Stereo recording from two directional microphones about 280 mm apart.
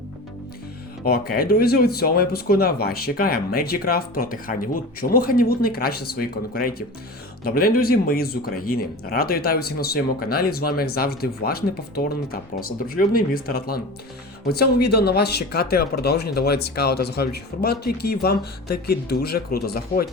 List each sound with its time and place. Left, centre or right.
1.0 s speech: left